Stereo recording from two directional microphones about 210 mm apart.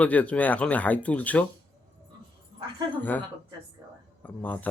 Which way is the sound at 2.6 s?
20° right (ahead or behind).